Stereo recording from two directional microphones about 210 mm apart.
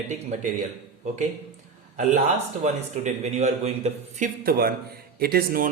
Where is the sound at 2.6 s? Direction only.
35° right (ahead or behind).